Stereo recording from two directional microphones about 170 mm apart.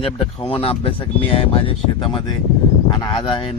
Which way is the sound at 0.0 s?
35° left (ahead or behind).